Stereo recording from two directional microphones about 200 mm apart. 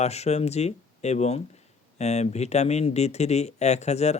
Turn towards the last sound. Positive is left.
turn(degrees=35)  # may be behind; listen again after turning